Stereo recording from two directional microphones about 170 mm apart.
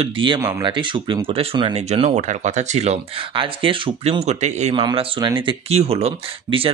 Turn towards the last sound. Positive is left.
turn(degrees=-35)  # may be behind; listen again after turning